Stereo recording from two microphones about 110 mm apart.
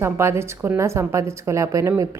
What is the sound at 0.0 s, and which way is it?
A woman's voice, 25° right (ahead or behind).